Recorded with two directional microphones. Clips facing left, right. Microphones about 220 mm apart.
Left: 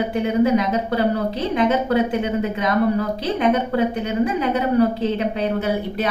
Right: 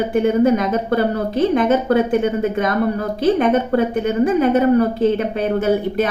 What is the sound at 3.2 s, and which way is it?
A woman's voice, 50° right (ahead or behind).